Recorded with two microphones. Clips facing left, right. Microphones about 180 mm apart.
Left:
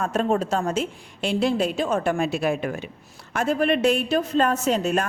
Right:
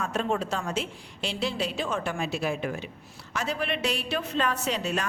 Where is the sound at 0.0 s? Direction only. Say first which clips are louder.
Left 6 dB; 45° left (ahead or behind).